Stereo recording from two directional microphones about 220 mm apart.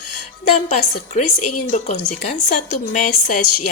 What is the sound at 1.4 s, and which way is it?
Speech, 90° left.